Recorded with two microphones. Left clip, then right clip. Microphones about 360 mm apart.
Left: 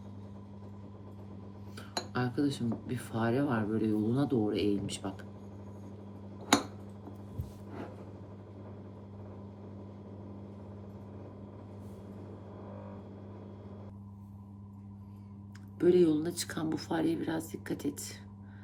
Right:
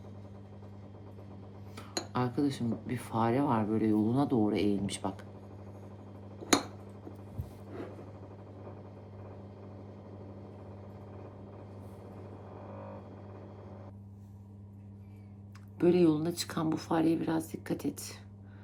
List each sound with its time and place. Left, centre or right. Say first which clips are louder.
1.7 s speech: right 1 dB; centre
15.8 s speech: left 1 dB; centre